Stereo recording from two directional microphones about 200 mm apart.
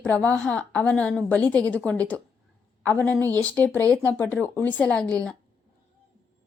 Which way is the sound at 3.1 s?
15° right (ahead or behind).